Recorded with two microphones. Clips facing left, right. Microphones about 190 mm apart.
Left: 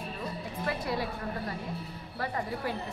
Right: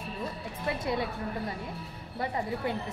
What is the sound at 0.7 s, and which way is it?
Speech, 20° right (ahead or behind).